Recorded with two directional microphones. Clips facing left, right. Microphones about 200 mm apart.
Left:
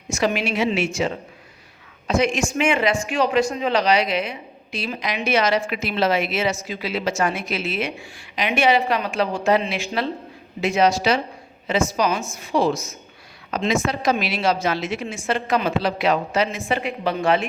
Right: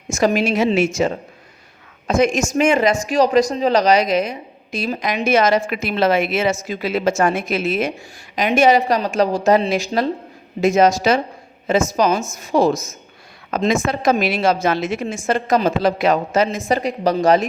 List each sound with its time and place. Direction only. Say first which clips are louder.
0.1 s speech: right 5 dB; 45° right (ahead or behind)